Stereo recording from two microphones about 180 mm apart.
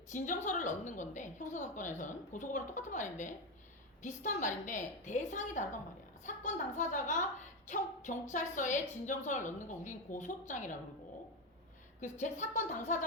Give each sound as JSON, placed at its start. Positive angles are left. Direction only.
{"t": 0.1, "sound": "a woman's voice", "side_deg": 45}
{"t": 8.3, "sound": "a woman's voice", "side_deg": 45}
{"t": 11.9, "sound": "a woman's voice", "side_deg": 45}